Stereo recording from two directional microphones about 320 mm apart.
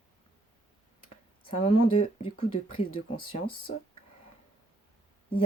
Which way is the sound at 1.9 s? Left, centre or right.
Centre.